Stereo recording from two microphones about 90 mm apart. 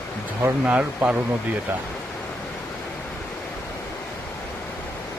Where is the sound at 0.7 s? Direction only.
15° right (ahead or behind).